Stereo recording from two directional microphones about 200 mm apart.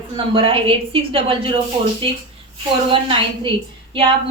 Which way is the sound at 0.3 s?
25° right (ahead or behind).